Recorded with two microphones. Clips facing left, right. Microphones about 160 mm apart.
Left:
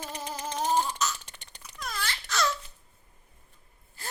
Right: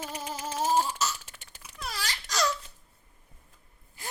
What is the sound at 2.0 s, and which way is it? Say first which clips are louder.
Wail: even; 15° right (ahead or behind).